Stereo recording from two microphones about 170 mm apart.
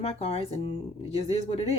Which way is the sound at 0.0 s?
40° left (ahead or behind).